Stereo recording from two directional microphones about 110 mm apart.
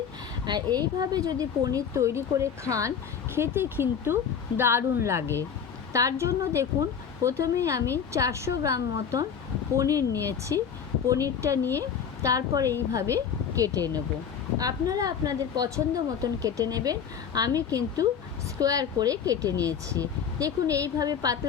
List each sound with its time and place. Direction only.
0.4 s a woman's voice: 40° right (ahead or behind)